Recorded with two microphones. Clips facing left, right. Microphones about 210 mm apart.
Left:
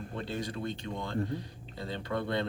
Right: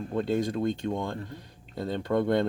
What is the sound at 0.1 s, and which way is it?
Speech, 50° right (ahead or behind).